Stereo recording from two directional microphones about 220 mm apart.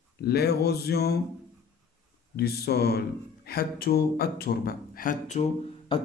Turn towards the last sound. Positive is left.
turn(degrees=25)  # may be behind; listen again after turning